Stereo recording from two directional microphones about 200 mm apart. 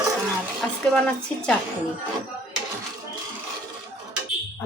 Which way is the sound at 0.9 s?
5° left (ahead or behind).